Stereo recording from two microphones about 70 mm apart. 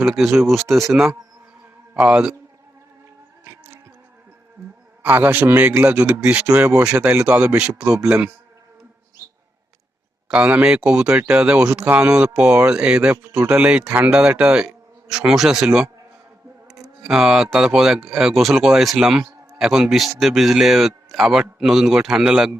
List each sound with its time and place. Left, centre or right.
0.0 s speech: centre
1.9 s a man's voice: centre
3.4 s music: right
5.0 s speech: right
10.2 s speech: centre
17.0 s speech: centre